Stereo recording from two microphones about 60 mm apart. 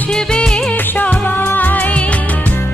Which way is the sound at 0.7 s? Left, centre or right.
Left.